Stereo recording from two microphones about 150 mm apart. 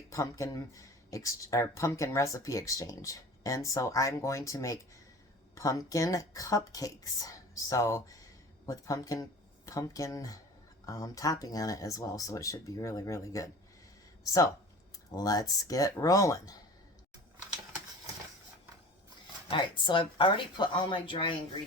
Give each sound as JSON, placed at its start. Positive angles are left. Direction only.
{"t": 0.1, "sound": "speech", "side_deg": 20}
{"t": 15.1, "sound": "speech", "side_deg": 25}
{"t": 19.5, "sound": "speech", "side_deg": 30}